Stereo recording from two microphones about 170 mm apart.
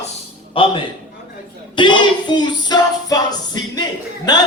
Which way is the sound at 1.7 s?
25° left (ahead or behind).